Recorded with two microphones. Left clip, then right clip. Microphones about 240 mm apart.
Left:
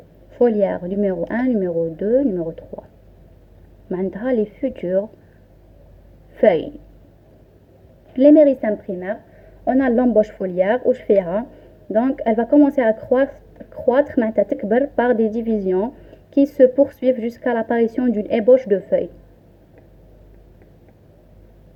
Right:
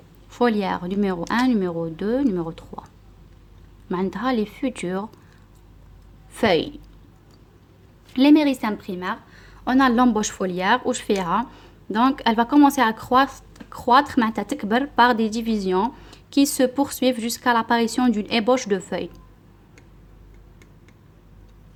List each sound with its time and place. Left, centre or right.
0.5 s speech: right
3.8 s speech: right
6.3 s speech: right
8.1 s speech: right